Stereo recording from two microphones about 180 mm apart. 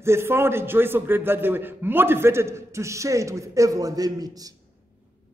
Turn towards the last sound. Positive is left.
turn(degrees=-20)  # may be behind; listen again after turning